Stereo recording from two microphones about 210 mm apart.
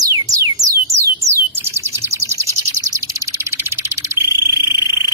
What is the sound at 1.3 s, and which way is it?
Bird, 10° right (ahead or behind).